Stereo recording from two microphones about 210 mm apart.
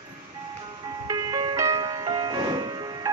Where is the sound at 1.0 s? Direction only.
20° right (ahead or behind).